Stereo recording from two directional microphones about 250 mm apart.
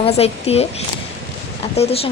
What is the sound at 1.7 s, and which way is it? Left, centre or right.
Speech, left.